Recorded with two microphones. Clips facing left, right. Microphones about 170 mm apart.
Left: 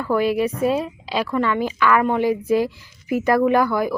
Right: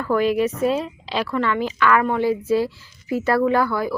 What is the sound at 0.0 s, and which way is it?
Speech, 10° left (ahead or behind).